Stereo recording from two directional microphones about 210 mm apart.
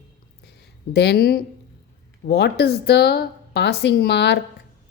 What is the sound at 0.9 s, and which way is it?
A woman's voice, 50° left (ahead or behind).